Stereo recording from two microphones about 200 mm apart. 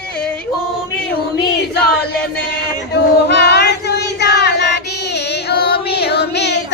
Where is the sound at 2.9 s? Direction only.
55° left (ahead or behind).